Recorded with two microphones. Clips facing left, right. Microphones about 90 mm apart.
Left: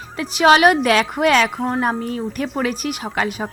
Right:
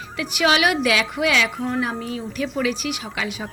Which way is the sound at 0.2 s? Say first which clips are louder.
Left 6 dB; 35° left (ahead or behind).